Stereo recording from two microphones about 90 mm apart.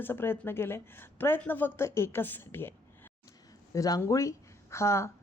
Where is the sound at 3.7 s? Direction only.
40° left (ahead or behind).